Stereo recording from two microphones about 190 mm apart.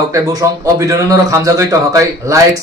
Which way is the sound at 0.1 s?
20° right (ahead or behind).